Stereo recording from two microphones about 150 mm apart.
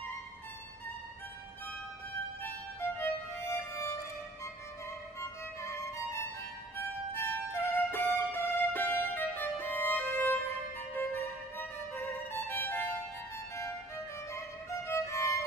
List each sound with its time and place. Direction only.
2.4 s music: 15° left (ahead or behind)
5.2 s music: 20° left (ahead or behind)
14.9 s violin: 20° left (ahead or behind)